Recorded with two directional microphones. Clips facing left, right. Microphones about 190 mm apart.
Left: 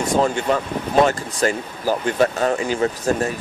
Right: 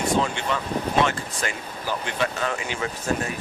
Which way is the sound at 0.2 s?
40° left (ahead or behind).